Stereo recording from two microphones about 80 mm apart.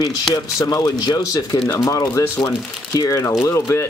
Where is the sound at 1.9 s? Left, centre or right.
Left.